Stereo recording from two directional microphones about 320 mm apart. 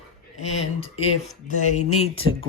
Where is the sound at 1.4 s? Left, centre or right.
Left.